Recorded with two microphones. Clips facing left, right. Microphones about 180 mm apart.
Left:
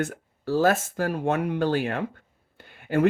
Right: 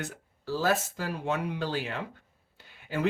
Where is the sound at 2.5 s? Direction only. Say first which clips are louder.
Left 9 dB; 55° left (ahead or behind).